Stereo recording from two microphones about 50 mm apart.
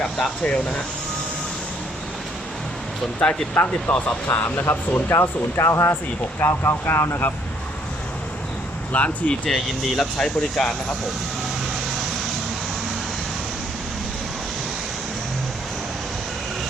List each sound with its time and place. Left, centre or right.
0.0 s speech: centre
3.5 s speech: left
5.5 s speech: left
6.4 s speech: left
8.9 s speech: left
9.5 s speech: centre